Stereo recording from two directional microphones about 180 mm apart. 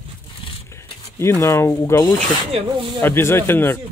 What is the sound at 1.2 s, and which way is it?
Speech, 15° left (ahead or behind).